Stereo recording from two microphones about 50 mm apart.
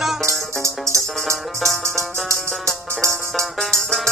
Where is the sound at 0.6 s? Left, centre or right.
Right.